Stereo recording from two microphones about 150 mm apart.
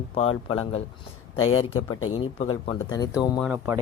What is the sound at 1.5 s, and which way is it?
Speech, 40° left (ahead or behind).